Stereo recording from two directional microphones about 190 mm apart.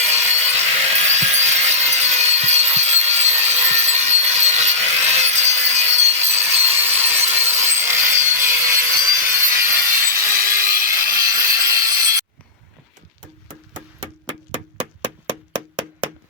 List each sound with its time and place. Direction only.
0.0 s wood: 15° right (ahead or behind)
0.3 s sawing: 35° right (ahead or behind)
6.6 s sawing: 10° right (ahead or behind)
15.3 s a sound: 25° right (ahead or behind)